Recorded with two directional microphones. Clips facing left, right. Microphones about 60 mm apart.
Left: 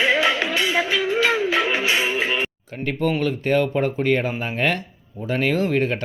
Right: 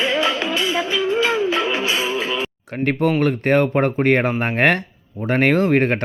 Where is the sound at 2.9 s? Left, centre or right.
Right.